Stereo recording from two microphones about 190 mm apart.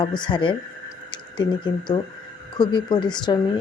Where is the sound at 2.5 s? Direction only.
25° left (ahead or behind).